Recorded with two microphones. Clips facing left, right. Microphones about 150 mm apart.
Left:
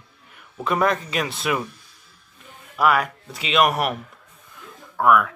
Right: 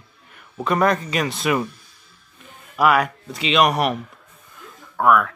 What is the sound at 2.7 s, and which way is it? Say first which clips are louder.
Speech: right 2 dB; centre (ahead or behind).